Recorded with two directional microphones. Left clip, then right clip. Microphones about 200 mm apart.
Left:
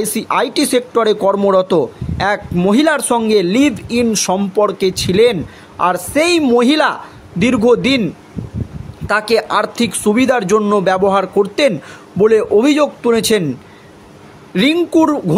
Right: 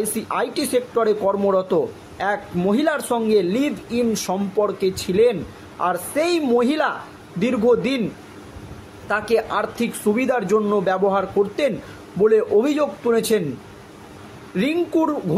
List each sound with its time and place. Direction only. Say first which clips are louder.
0.1 s speech: left 8 dB; 50° left (ahead or behind)
9.0 s speech: left 6 dB; 50° left (ahead or behind)
14.5 s speech: left 8 dB; 50° left (ahead or behind)